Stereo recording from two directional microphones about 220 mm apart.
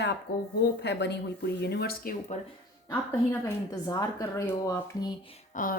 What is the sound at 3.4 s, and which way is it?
Speech, 15° left (ahead or behind).